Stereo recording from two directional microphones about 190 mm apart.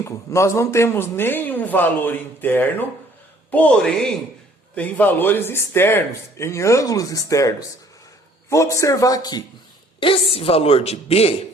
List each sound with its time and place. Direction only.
0.0 s speech: 15° left (ahead or behind); by 11.3 s 30° left (ahead or behind)